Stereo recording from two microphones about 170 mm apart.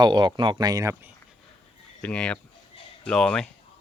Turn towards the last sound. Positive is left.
turn(degrees=5)  # may be behind; listen again after turning